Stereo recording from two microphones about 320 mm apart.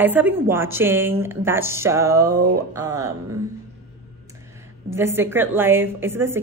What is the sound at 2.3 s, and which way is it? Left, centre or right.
Speech, right.